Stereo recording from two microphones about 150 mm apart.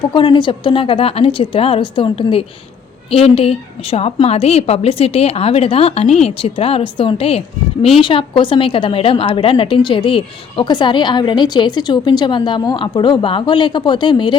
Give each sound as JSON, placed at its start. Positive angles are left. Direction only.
{"t": 0.1, "sound": "a woman's voice", "side_deg": 35}